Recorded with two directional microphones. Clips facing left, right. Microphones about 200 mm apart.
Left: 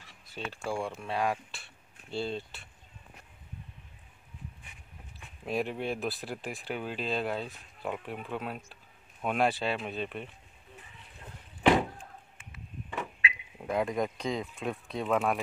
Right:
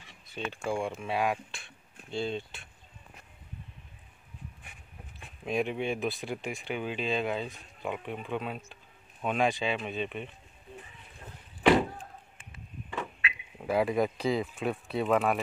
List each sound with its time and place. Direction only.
0.0 s speech: centre (ahead or behind)
5.4 s speech: centre (ahead or behind)
12.0 s a sound: 30° right (ahead or behind)
13.3 s speech: 5° right (ahead or behind)